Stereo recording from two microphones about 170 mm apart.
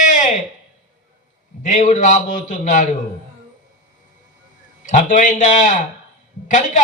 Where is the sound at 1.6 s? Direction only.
45° left (ahead or behind).